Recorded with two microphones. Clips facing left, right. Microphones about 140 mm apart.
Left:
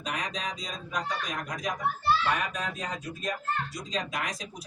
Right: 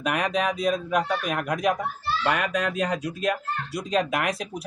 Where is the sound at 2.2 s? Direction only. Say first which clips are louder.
Right 5 dB; 70° right (ahead or behind).